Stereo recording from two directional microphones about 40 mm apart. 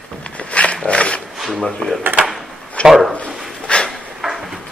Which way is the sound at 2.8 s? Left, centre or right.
Centre.